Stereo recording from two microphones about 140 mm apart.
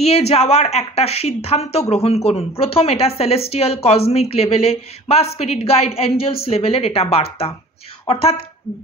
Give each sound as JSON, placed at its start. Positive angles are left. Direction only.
{"t": 0.0, "sound": "a woman's voice", "side_deg": 50}